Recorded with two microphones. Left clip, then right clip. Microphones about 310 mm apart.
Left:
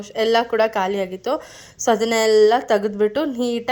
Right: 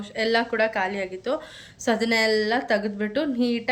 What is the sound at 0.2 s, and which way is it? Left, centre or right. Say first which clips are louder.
A woman's voice: left 5 dB; centre.